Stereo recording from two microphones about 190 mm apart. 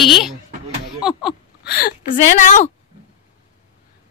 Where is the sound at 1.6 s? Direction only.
55° left (ahead or behind).